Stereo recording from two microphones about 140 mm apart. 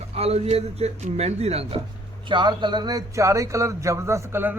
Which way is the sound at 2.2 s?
35° right (ahead or behind).